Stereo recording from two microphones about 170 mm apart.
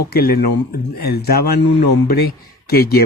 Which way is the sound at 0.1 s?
65° left (ahead or behind).